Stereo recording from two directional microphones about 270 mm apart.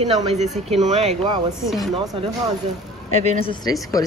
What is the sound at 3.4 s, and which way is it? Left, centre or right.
Speech, centre.